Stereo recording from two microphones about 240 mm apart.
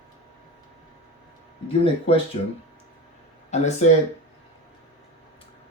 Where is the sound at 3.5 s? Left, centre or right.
Left.